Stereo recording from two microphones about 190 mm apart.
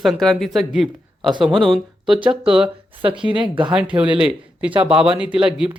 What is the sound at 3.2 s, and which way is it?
Speech, 25° right (ahead or behind).